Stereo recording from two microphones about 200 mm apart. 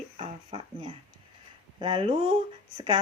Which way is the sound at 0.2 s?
25° right (ahead or behind).